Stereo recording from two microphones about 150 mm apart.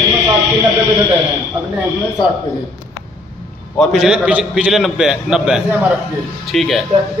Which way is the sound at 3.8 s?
Centre (ahead or behind).